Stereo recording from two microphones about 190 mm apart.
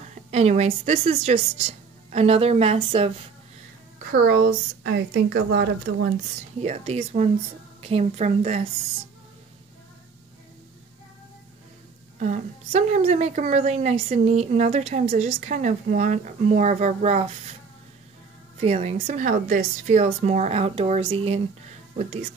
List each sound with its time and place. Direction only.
0.1 s a woman's voice: 35° right (ahead or behind)
4.1 s speech: 55° right (ahead or behind)
6.6 s a woman's voice: 35° right (ahead or behind)
12.2 s a woman's voice: 40° right (ahead or behind)
18.6 s a woman's voice: 35° right (ahead or behind)